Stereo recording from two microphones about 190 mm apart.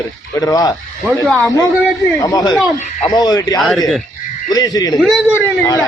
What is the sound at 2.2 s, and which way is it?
A man's voice, 20° left (ahead or behind).